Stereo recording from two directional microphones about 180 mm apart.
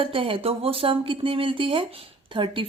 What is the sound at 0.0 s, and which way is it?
A woman's voice, 30° right (ahead or behind).